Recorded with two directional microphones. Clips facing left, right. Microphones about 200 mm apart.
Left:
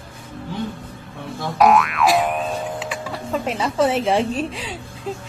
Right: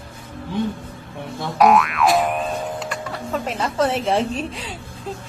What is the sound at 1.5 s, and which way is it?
Boing, centre (ahead or behind).